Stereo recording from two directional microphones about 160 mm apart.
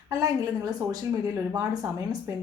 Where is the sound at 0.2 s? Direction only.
25° right (ahead or behind).